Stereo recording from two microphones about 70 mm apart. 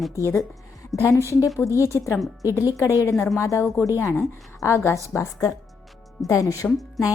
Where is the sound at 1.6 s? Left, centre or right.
Left.